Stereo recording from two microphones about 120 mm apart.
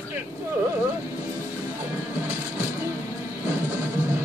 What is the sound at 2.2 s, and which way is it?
Music, 25° right (ahead or behind).